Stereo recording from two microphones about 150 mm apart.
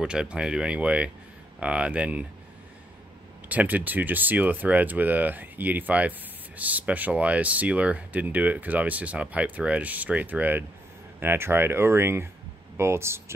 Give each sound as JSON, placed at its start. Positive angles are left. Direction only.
{"t": 0.0, "sound": "speech", "side_deg": -5}
{"t": 3.4, "sound": "speech", "side_deg": -10}